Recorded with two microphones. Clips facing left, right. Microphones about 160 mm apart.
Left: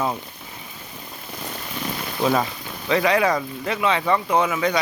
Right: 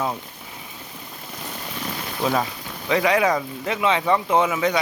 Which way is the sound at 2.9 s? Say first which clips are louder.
Even; 15° right (ahead or behind).